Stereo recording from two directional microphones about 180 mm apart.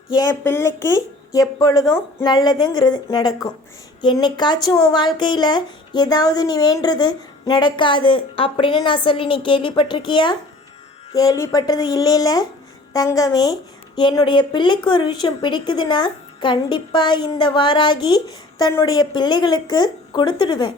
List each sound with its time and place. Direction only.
0.1 s speech: 20° left (ahead or behind)